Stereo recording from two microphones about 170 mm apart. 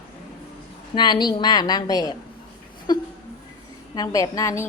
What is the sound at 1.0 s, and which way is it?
A woman's voice, 25° left (ahead or behind).